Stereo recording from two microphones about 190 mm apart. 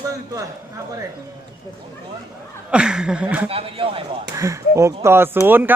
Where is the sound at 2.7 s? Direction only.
5° right (ahead or behind).